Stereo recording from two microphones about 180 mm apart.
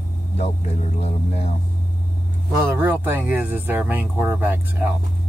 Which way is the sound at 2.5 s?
15° right (ahead or behind).